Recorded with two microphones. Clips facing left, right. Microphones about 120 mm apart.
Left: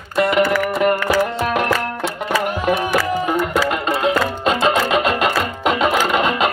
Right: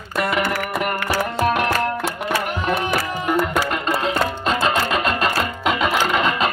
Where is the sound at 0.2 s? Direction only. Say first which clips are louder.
Left 6 dB; 25° left (ahead or behind).